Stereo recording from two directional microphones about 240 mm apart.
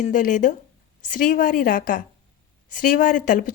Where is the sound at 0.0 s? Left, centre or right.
Left.